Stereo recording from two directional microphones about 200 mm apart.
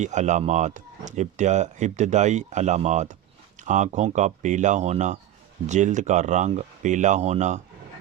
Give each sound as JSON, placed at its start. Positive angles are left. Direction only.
{"t": 0.0, "sound": "speech", "side_deg": -35}